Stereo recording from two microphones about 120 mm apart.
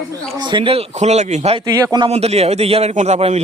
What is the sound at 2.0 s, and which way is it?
Speech, 60° right (ahead or behind).